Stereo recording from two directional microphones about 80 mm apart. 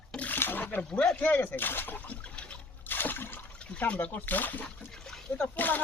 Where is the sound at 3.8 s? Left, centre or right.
Centre.